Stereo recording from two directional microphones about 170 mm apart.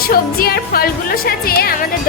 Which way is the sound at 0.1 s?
60° left (ahead or behind).